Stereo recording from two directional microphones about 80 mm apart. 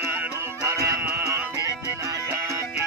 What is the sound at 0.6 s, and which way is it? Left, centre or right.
Music, right.